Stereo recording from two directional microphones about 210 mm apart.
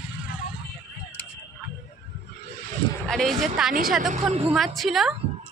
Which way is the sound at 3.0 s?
Centre (ahead or behind).